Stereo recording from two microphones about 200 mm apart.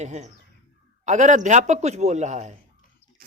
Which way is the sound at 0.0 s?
35° right (ahead or behind).